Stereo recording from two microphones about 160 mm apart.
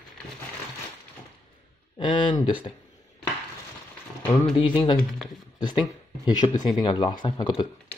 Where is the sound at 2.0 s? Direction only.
30° left (ahead or behind).